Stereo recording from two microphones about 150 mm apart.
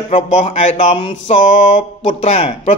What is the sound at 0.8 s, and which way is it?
Speech, 35° left (ahead or behind).